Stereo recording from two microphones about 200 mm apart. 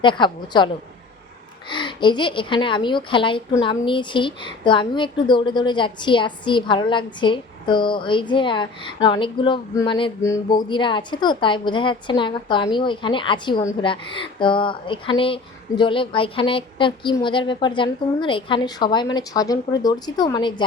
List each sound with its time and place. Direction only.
0.0 s a woman's voice: 25° left (ahead or behind)
1.7 s a woman's voice: 25° left (ahead or behind)